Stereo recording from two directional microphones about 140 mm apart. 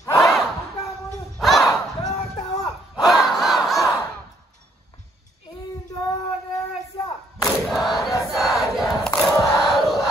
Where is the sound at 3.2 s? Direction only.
Centre (ahead or behind).